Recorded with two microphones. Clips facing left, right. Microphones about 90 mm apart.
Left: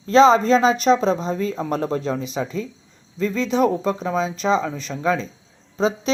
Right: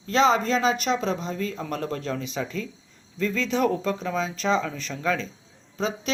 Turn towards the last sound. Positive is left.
turn(degrees=25)  # may be behind; listen again after turning